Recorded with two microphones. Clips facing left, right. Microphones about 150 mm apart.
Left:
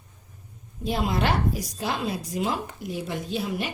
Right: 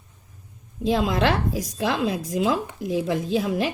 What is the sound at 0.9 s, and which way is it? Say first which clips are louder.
A woman's voice: right 4 dB; 90° right.